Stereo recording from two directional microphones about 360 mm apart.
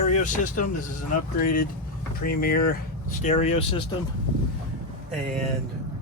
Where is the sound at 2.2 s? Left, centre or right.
Left.